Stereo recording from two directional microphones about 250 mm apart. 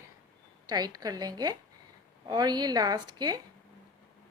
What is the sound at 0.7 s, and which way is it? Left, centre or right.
A woman's voice, centre.